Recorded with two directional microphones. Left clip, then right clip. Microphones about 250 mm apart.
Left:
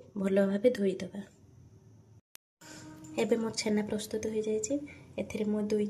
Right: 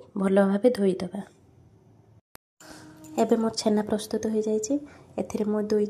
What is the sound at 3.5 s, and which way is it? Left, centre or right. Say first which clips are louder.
A woman's voice: right 7 dB; centre.